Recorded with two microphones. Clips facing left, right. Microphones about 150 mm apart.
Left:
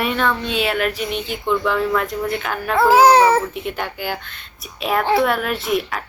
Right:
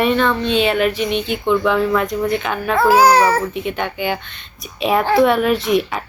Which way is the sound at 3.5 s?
Centre (ahead or behind).